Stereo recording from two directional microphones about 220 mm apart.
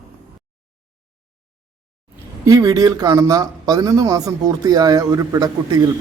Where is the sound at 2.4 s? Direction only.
15° right (ahead or behind).